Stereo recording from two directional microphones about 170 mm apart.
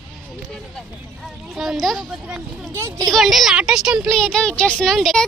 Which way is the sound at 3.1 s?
Centre (ahead or behind).